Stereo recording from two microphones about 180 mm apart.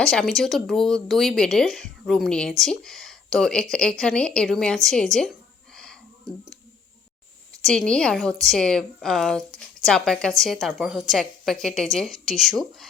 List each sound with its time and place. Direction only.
0.0 s speech: 5° left (ahead or behind)
7.6 s speech: 5° left (ahead or behind)